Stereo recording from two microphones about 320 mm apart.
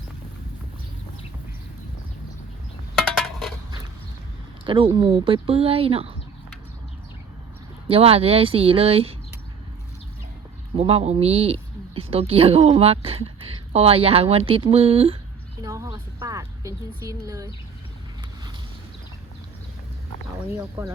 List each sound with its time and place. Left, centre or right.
2.9 s a sound: centre
4.6 s a woman's voice: centre
7.9 s a woman's voice: centre
10.8 s a woman's voice: centre
20.5 s a woman's voice: centre